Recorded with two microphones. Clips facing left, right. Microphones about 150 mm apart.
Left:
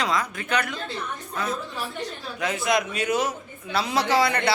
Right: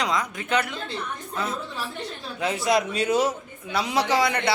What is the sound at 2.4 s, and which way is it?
Speech, 30° right (ahead or behind).